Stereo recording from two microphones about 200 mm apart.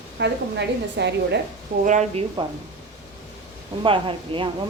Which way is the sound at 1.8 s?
35° right (ahead or behind).